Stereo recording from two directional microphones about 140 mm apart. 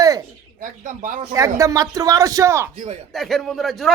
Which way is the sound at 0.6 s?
70° right (ahead or behind).